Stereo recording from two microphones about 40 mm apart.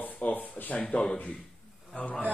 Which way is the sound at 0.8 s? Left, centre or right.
Left.